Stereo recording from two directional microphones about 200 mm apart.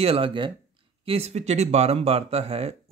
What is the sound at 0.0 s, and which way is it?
Speech, 30° right (ahead or behind).